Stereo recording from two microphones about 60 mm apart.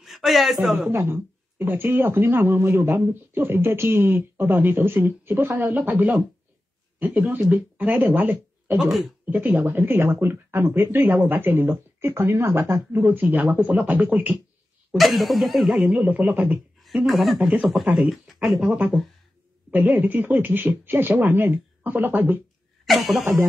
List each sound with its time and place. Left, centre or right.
0.0 s a man's voice: centre
0.8 s speech: right
8.7 s speech: centre
9.2 s speech: right
15.0 s speech: centre
15.9 s speech: right
16.8 s speech: centre
17.4 s speech: centre
18.1 s speech: centre
19.7 s speech: right
22.8 s speech: centre